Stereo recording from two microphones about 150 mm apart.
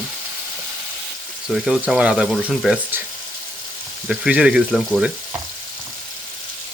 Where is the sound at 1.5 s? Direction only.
Centre (ahead or behind).